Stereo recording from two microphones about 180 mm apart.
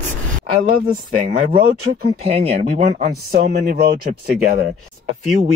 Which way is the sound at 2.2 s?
35° right (ahead or behind).